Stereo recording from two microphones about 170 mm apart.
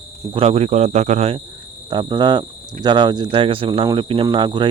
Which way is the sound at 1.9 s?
25° right (ahead or behind).